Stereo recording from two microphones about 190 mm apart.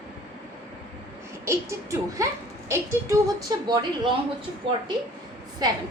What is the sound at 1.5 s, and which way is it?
A woman's voice, 15° right (ahead or behind).